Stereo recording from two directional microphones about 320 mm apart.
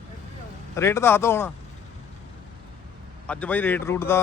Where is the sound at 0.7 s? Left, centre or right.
Centre.